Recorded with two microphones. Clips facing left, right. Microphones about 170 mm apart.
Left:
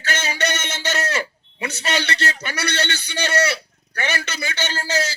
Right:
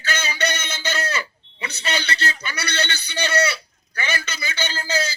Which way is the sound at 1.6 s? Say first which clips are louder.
Left 3 dB; 60° left (ahead or behind).